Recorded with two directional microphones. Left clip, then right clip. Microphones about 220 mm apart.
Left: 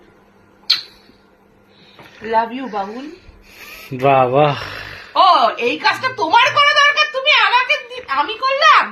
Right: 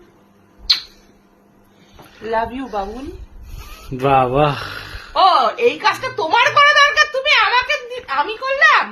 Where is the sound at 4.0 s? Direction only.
15° right (ahead or behind).